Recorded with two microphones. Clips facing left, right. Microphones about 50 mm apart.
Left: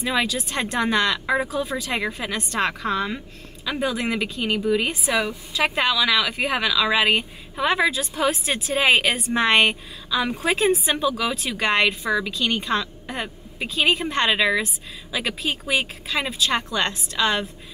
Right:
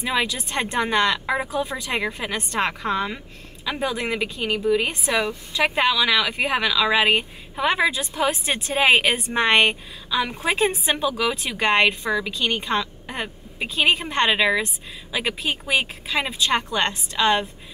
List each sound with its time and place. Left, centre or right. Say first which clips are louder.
0.0 s speech: left 1 dB; centre
11.5 s speech: right 2 dB; centre
11.9 s speech: left 1 dB; centre
12.4 s a woman's voice: even; centre